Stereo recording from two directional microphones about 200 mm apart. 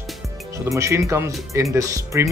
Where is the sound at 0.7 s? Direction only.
15° right (ahead or behind).